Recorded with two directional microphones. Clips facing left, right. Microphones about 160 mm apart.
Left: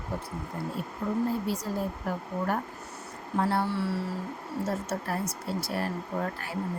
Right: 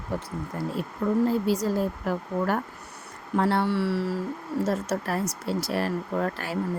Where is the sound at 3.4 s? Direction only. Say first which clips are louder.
Right 4 dB; 80° right.